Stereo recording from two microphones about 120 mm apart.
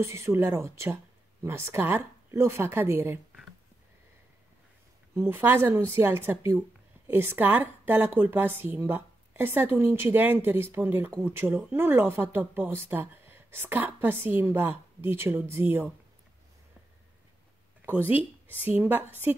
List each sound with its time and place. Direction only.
0.0 s a woman's voice: 20° right (ahead or behind)
5.1 s a woman's voice: 15° right (ahead or behind)
17.8 s a woman's voice: 15° right (ahead or behind)